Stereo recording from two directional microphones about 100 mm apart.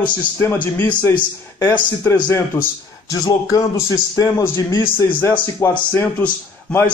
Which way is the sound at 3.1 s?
35° left (ahead or behind).